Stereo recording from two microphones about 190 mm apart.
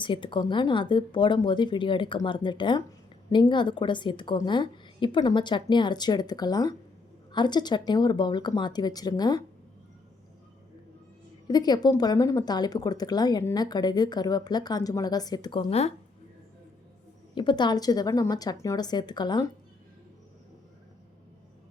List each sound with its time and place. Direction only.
0.0 s speech: 25° left (ahead or behind)
11.4 s speech: 20° left (ahead or behind)
17.3 s speech: 25° left (ahead or behind)